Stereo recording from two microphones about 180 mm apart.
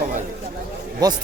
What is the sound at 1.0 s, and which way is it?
Speech, 20° right (ahead or behind).